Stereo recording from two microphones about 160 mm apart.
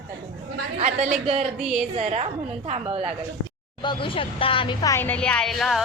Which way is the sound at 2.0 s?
40° right (ahead or behind).